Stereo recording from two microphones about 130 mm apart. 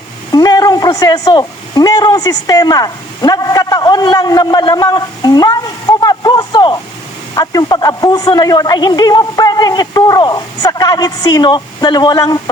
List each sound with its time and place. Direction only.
0.3 s a man's voice: 30° left (ahead or behind)